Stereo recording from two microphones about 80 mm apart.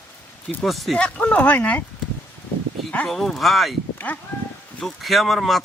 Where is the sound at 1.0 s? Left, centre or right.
Centre.